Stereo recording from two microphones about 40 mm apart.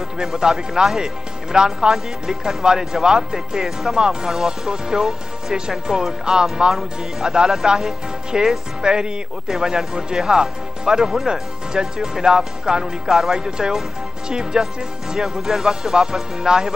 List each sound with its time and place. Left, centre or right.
0.2 s speech: centre
11.1 s speech: centre
11.7 s speech: centre